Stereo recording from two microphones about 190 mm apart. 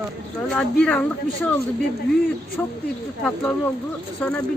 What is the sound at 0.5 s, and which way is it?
Speech, 5° left (ahead or behind).